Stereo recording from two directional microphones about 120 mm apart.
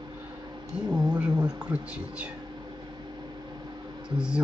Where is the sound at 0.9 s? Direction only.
10° right (ahead or behind).